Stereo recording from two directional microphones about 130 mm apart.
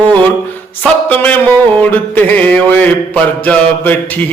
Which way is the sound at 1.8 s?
15° left (ahead or behind).